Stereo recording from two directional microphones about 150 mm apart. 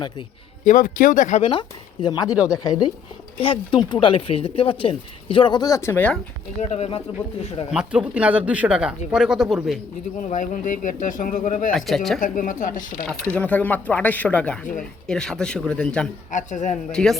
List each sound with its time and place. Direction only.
0.6 s speech: 60° left (ahead or behind)
1.5 s speech: 30° left (ahead or behind); by 6.1 s 10° left (ahead or behind)
6.6 s speech: 45° left (ahead or behind)
7.7 s speech: 5° right (ahead or behind)
10.2 s speech: 55° left (ahead or behind)
11.7 s speech: centre (ahead or behind)
12.2 s speech: 60° left (ahead or behind)
13.2 s speech: 10° left (ahead or behind)
16.3 s speech: 55° left (ahead or behind)
16.9 s speech: 5° left (ahead or behind)